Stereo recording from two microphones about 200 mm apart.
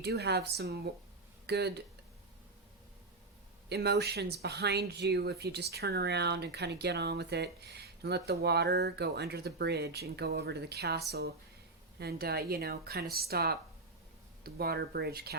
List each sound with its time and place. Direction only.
0.0 s speech: 55° right (ahead or behind)
3.7 s speech: 55° right (ahead or behind)